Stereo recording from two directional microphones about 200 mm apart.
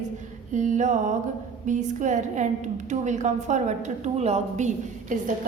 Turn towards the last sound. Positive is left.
turn(degrees=-40)  # may be behind; listen again after turning